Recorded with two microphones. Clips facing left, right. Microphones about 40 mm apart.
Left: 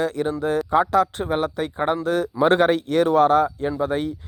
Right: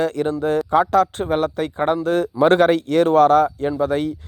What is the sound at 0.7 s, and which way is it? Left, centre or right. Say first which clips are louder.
Speech: right 2 dB; right.